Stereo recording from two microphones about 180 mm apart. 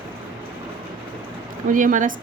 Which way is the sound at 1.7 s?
50° right (ahead or behind).